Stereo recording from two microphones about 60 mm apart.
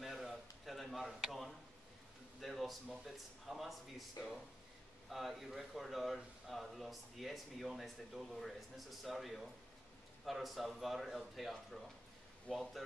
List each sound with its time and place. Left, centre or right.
0.0 s a sound: centre
2.4 s a man's voice: centre
4.2 s speech: left
5.1 s a man's voice: centre